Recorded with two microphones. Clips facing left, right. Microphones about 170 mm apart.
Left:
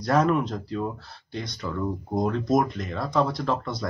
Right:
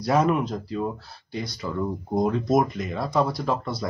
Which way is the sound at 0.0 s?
5° right (ahead or behind).